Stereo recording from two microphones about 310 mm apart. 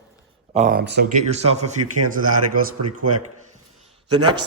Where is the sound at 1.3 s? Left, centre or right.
Right.